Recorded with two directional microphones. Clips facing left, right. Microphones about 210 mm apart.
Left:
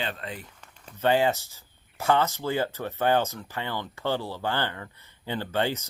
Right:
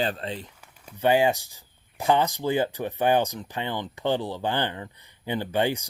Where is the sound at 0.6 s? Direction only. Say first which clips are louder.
Right 2 dB; 10° right (ahead or behind).